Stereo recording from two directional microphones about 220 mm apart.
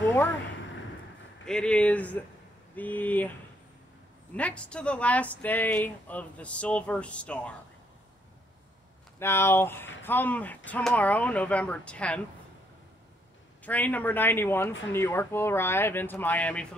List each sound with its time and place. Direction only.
1.4 s speech: 5° left (ahead or behind)
9.2 s speech: 10° left (ahead or behind)
13.7 s speech: 5° left (ahead or behind)